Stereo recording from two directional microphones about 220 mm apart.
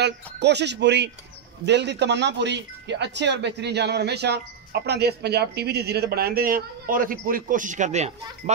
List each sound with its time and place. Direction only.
0.0 s speech: 50° right (ahead or behind); by 8.5 s 30° right (ahead or behind)